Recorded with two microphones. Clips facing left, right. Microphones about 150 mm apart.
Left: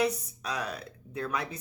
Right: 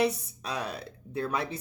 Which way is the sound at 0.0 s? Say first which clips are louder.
Right 1 dB; 30° right (ahead or behind).